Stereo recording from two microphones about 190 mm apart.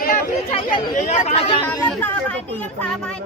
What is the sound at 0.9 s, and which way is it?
Speech, 40° left (ahead or behind).